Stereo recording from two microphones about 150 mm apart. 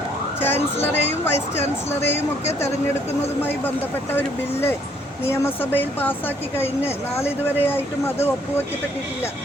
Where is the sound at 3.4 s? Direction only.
15° left (ahead or behind).